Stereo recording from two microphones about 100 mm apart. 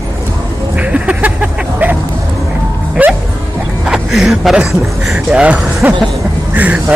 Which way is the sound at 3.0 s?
15° right (ahead or behind).